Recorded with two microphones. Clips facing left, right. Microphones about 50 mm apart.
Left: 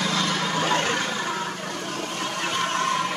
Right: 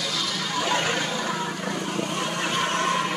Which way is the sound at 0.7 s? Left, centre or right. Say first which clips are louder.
Left 1 dB; centre.